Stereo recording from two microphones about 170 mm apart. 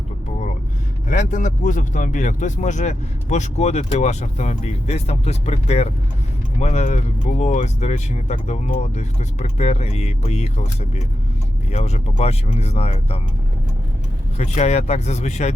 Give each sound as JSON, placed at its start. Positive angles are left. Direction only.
{"t": 1.0, "sound": "speech", "side_deg": 45}
{"t": 14.3, "sound": "speech", "side_deg": 40}